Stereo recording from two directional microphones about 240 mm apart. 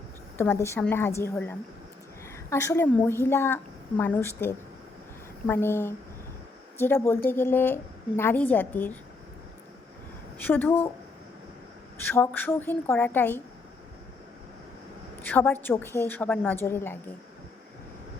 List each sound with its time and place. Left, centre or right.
0.3 s a woman's voice: centre
10.3 s a woman's voice: centre
12.0 s a woman's voice: centre
15.2 s a woman's voice: centre